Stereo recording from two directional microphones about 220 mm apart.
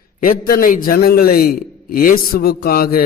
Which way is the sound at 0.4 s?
40° left (ahead or behind).